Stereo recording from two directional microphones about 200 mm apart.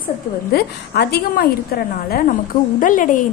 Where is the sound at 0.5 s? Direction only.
55° left (ahead or behind).